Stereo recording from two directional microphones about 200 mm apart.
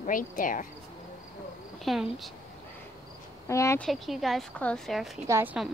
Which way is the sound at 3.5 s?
15° left (ahead or behind).